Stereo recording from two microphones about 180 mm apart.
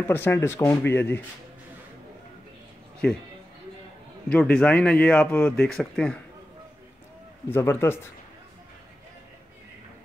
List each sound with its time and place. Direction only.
0.0 s speech: 10° left (ahead or behind)
4.3 s speech: 5° left (ahead or behind)
7.4 s speech: 10° left (ahead or behind)